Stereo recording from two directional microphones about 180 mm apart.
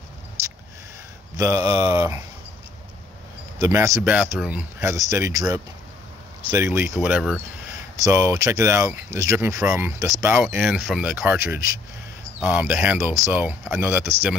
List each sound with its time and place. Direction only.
0.4 s a sound: 15° right (ahead or behind)
1.4 s speech: 15° right (ahead or behind)
3.6 s speech: 15° right (ahead or behind)
10.4 s speech: 5° right (ahead or behind)